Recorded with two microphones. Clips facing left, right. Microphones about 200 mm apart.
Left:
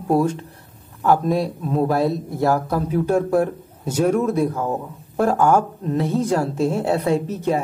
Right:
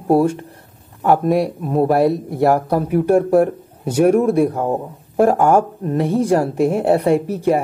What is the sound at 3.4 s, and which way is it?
Speech, 15° right (ahead or behind).